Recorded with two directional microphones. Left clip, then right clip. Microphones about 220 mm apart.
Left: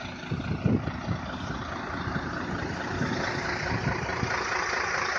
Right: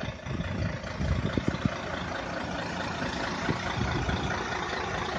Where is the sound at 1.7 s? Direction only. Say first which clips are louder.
Left 1 dB; 35° right (ahead or behind).